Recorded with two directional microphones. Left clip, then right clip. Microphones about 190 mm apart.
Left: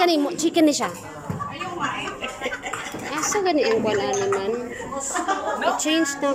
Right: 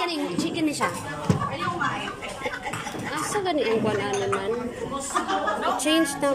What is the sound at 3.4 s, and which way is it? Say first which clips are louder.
Speech: left 3 dB; 10° left (ahead or behind).